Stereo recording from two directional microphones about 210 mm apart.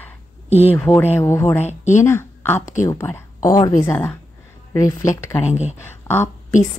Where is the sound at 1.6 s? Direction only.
35° left (ahead or behind).